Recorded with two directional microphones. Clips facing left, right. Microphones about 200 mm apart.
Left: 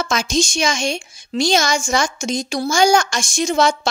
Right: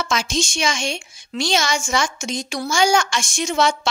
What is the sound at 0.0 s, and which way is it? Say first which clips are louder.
A woman's voice: left 3 dB; 40° left (ahead or behind).